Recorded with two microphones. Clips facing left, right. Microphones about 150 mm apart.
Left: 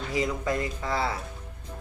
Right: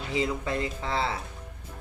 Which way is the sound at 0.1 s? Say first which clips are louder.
Left 1 dB; 25° right (ahead or behind).